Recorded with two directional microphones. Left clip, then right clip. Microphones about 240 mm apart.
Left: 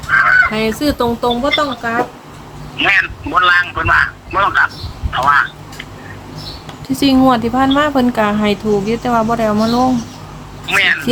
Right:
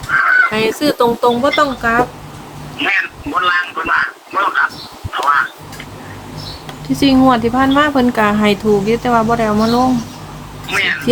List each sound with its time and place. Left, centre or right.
0.1 s fowl: left
0.5 s speech: centre
2.7 s speech: left
6.8 s speech: centre